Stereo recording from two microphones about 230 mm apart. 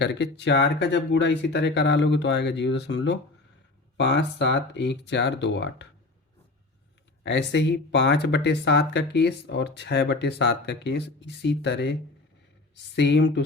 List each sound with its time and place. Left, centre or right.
0.0 s speech: left
7.3 s speech: left